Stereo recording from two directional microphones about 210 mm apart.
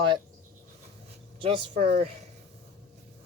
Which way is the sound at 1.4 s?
25° right (ahead or behind).